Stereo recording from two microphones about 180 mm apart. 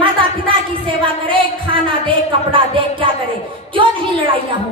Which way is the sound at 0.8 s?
30° right (ahead or behind).